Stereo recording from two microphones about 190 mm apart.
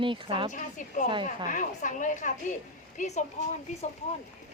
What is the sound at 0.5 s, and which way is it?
A woman's voice, 40° left (ahead or behind).